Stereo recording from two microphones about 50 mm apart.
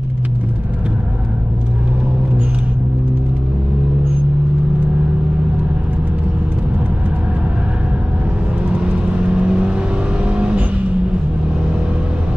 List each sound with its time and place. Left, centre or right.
8.7 s vehicle: right